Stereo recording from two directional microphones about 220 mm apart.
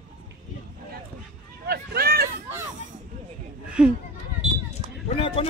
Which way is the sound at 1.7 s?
45° right (ahead or behind).